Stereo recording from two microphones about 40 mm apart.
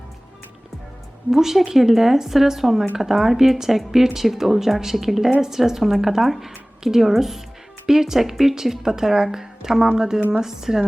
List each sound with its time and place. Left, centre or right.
1.3 s speech: centre